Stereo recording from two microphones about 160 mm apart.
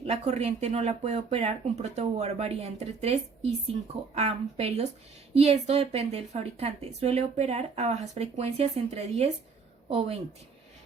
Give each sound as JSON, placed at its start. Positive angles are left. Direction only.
{"t": 0.0, "sound": "a woman's voice", "side_deg": -40}